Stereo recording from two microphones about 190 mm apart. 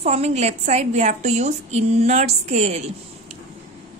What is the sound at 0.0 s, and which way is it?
A woman's voice, 35° right (ahead or behind).